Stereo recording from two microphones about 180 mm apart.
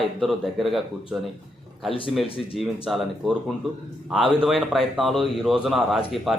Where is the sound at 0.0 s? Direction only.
Centre (ahead or behind).